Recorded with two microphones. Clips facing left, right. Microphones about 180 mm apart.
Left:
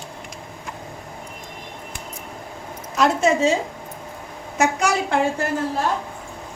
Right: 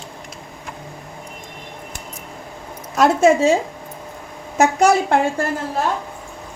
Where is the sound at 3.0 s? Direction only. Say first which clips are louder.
Right 5 dB; 50° right (ahead or behind).